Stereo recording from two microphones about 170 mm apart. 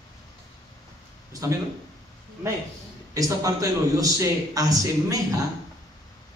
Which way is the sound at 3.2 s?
20° right (ahead or behind).